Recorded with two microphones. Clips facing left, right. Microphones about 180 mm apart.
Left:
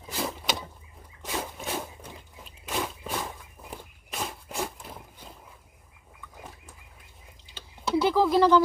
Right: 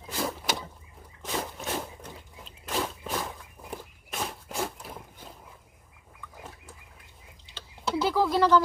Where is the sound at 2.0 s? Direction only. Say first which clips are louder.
Right 1 dB; 5° left (ahead or behind).